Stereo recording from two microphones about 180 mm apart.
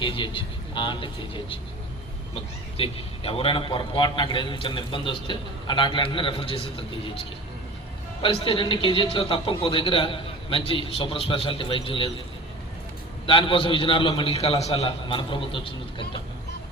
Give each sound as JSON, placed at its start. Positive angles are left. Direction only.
{"t": 0.0, "sound": "a man's voice", "side_deg": 25}
{"t": 13.2, "sound": "a man's voice", "side_deg": 30}